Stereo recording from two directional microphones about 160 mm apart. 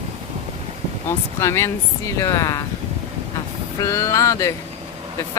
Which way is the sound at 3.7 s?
20° left (ahead or behind).